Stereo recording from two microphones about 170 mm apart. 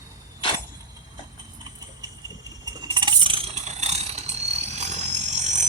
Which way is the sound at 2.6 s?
25° right (ahead or behind).